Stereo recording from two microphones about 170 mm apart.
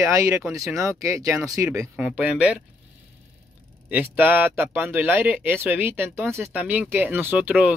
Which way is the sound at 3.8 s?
10° right (ahead or behind).